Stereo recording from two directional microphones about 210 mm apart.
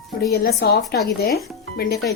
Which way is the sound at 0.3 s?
50° left (ahead or behind).